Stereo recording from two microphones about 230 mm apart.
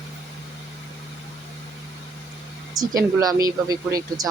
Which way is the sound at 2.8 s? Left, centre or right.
Centre.